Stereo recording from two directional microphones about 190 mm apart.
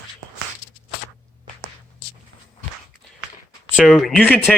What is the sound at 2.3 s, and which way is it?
Walk, 75° right (ahead or behind).